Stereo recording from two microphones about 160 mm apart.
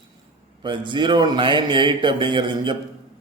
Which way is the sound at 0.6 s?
30° right (ahead or behind).